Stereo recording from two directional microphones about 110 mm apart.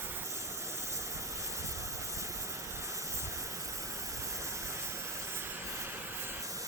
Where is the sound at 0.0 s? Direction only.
20° right (ahead or behind).